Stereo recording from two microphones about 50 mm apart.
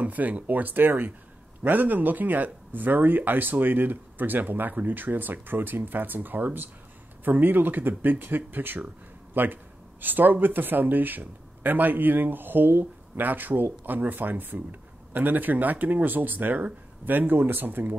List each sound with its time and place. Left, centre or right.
0.0 s speech: right